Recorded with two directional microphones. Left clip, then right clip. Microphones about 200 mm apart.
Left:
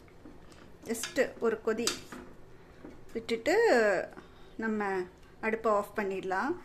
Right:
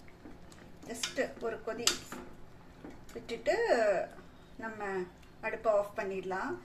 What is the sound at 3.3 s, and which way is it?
Speech, 55° left (ahead or behind).